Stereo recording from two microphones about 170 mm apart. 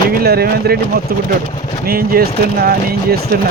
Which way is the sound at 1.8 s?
60° right (ahead or behind).